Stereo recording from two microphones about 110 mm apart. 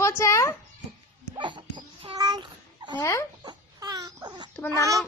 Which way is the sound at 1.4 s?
45° right (ahead or behind).